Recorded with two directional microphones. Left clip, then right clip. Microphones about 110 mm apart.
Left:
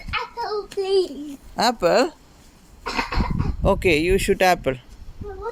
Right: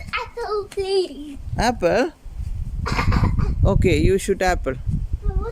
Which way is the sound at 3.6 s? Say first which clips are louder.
Left 1 dB; 25° right (ahead or behind).